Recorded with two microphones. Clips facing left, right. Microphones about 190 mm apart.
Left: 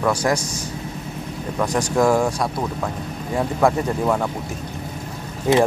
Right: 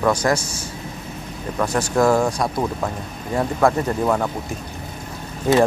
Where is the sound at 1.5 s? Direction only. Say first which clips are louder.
Even; 10° left (ahead or behind).